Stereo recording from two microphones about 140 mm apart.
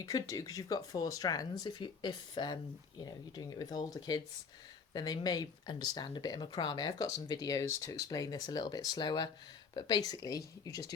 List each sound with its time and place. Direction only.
0.0 s speech: 25° left (ahead or behind)